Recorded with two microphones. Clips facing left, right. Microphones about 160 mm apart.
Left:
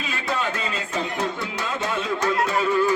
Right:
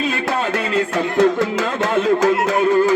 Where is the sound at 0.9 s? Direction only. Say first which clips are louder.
Right 11 dB; 80° right.